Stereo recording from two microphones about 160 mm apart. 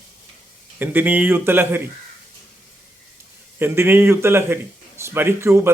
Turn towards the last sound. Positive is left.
turn(degrees=-15)  # may be behind; listen again after turning